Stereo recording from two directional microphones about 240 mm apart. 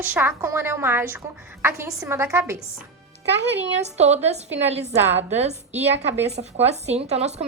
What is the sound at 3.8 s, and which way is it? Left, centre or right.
A woman's voice, right.